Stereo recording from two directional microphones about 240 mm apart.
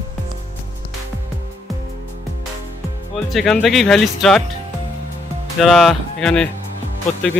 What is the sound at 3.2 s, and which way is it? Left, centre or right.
Speech, centre.